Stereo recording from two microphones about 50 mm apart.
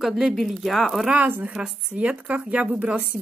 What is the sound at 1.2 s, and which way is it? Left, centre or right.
Speech, right.